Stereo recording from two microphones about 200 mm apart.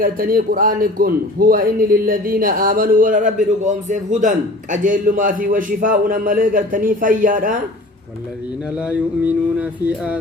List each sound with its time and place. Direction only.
0.0 s a man's voice: 45° right (ahead or behind)
8.7 s mantra: 5° right (ahead or behind)